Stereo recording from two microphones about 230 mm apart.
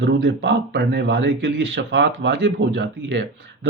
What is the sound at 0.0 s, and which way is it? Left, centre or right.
Speech, right.